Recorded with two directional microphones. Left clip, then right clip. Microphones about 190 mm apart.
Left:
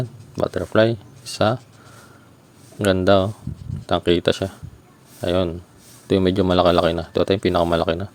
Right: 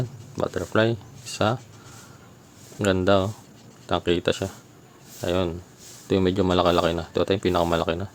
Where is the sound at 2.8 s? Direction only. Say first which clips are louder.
Left 4 dB; 20° left (ahead or behind).